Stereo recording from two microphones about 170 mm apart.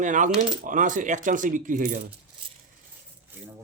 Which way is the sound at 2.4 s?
30° right (ahead or behind).